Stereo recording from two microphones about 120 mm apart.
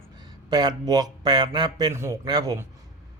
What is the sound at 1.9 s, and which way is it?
Speech, 25° right (ahead or behind).